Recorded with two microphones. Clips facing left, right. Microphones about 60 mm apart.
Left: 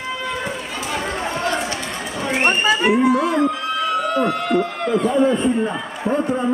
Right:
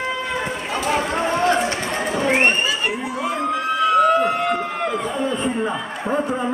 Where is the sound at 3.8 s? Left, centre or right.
Right.